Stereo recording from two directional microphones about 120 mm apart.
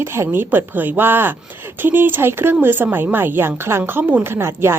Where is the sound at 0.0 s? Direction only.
20° right (ahead or behind).